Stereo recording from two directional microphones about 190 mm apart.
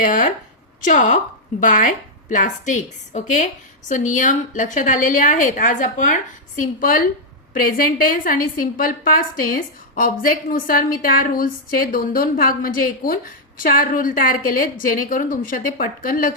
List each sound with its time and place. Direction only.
0.0 s a woman's voice: 45° left (ahead or behind)